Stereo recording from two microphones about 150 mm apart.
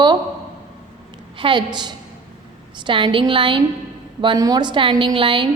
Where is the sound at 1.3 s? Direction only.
35° right (ahead or behind).